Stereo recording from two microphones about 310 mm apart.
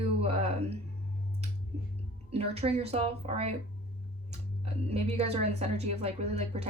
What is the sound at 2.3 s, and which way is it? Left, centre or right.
Speech, centre.